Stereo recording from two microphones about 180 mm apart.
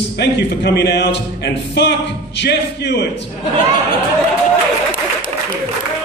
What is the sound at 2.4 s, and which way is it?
Speech, 75° left (ahead or behind).